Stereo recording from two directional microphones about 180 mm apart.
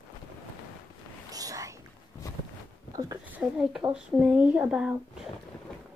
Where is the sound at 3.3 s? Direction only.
5° right (ahead or behind).